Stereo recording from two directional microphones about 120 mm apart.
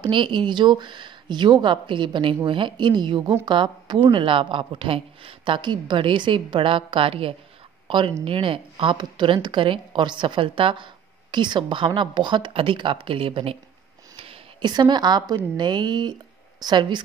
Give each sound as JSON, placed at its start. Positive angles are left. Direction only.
{"t": 0.0, "sound": "a woman's voice", "side_deg": -45}